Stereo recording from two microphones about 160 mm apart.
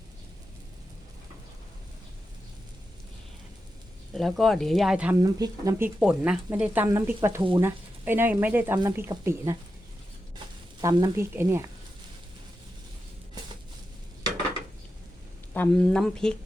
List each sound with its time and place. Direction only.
4.1 s speech: centre (ahead or behind)
5.1 s speech: 20° right (ahead or behind)
6.0 s speech: 5° right (ahead or behind)
10.8 s speech: 25° right (ahead or behind)
15.5 s speech: 10° left (ahead or behind)